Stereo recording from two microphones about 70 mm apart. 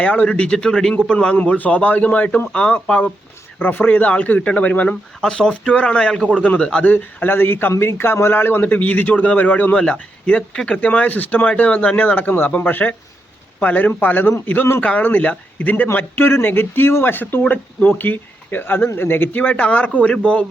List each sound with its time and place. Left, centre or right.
0.0 s a man's voice: centre
6.8 s a man's voice: left